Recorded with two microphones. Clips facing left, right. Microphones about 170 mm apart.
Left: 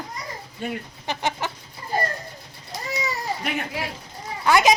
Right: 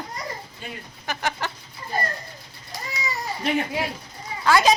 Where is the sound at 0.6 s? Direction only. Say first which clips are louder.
Left 11 dB; 55° left (ahead or behind).